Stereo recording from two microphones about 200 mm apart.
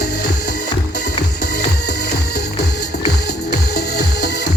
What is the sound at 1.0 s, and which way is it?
Music, 55° left (ahead or behind).